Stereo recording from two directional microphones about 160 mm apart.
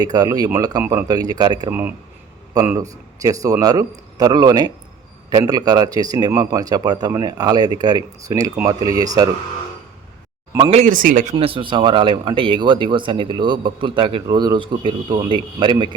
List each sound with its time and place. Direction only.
0.0 s speech: 25° right (ahead or behind)
10.7 s speech: 40° right (ahead or behind)
10.9 s speech: 55° right (ahead or behind)
11.3 s speech: 35° right (ahead or behind)